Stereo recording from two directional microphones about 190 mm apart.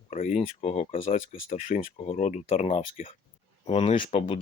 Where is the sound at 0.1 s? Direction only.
35° left (ahead or behind).